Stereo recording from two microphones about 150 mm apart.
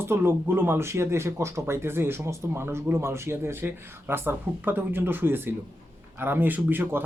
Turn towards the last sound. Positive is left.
turn(degrees=-15)  # may be behind; listen again after turning